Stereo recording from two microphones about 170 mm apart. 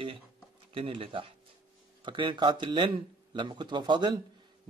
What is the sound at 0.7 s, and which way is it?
Speech, 35° right (ahead or behind).